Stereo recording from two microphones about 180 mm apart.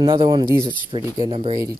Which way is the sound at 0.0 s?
25° right (ahead or behind).